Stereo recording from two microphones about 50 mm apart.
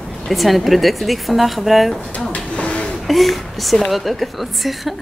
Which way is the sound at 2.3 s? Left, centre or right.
Left.